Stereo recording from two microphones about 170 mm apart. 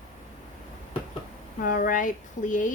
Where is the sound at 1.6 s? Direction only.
55° left (ahead or behind).